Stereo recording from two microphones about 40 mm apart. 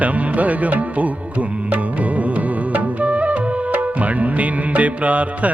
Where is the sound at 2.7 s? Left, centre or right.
Right.